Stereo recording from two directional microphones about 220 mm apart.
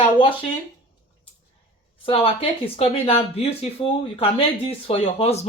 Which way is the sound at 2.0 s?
25° left (ahead or behind).